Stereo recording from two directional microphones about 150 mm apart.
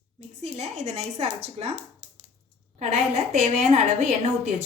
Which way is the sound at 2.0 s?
20° left (ahead or behind).